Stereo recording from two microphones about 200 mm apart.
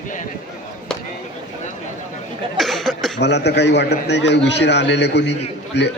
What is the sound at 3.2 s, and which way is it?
A man's voice, 60° left (ahead or behind).